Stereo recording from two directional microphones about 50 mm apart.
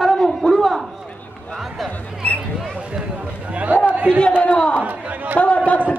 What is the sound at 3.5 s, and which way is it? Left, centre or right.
Speech, right.